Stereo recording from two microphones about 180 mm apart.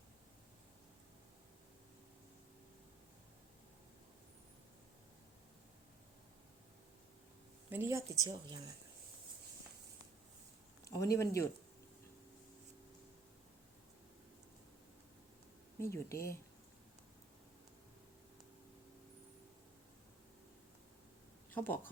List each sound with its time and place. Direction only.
7.7 s a woman's voice: 15° right (ahead or behind)
10.8 s speech: 20° left (ahead or behind)
15.8 s speech: 15° left (ahead or behind)
21.5 s speech: 10° left (ahead or behind)